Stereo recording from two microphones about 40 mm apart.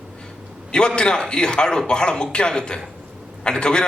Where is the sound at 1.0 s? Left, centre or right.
Left.